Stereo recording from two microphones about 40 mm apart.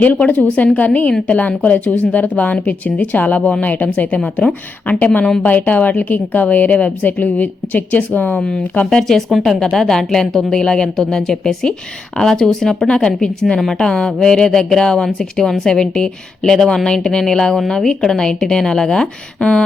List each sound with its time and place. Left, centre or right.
0.0 s a woman's voice: left
8.4 s a woman's voice: centre